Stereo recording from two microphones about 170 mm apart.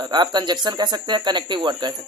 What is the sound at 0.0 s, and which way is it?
Speech, 25° right (ahead or behind).